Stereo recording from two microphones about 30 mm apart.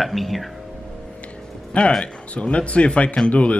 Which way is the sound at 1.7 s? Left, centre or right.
Left.